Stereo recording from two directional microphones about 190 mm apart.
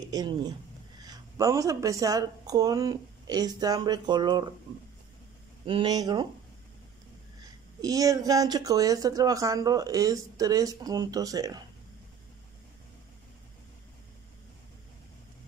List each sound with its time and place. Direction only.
0.1 s speech: 20° right (ahead or behind)
5.7 s speech: 25° right (ahead or behind)
7.8 s speech: 20° right (ahead or behind)